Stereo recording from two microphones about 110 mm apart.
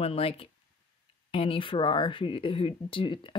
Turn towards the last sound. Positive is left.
turn(degrees=50)  # may be behind; listen again after turning